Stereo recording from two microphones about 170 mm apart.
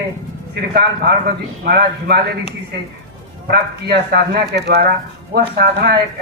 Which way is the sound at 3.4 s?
75° right (ahead or behind).